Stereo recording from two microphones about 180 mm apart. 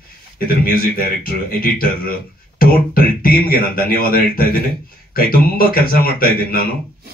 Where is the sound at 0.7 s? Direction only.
55° left (ahead or behind).